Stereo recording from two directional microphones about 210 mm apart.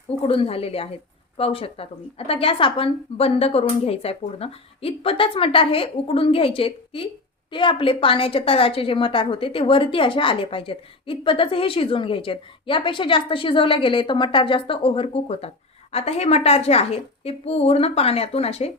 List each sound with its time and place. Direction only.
0.2 s a woman's voice: 25° left (ahead or behind)